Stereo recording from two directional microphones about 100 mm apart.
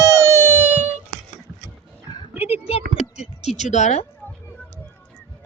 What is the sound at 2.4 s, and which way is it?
Speech, 90° left.